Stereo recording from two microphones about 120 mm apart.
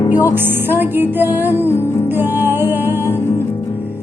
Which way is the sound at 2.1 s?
15° right (ahead or behind).